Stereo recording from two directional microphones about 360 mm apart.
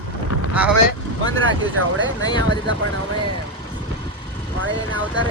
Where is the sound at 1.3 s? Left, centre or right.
Right.